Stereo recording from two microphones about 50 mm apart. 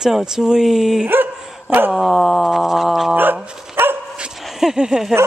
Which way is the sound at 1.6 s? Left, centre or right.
Right.